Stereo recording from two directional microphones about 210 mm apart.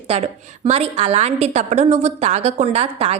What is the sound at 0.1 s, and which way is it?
A woman's voice, 30° right (ahead or behind).